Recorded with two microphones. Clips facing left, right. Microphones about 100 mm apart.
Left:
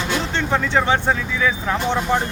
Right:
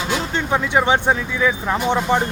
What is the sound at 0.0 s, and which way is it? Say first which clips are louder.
Speech: even; 10° right (ahead or behind).